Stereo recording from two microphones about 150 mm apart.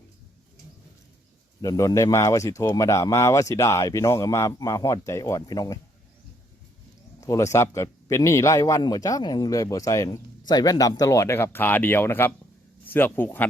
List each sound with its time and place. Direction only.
1.6 s speech: 25° left (ahead or behind)
7.2 s speech: 20° left (ahead or behind)